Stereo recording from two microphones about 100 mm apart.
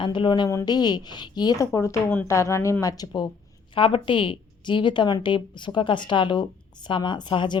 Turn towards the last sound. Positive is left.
turn(degrees=50)  # may be behind; listen again after turning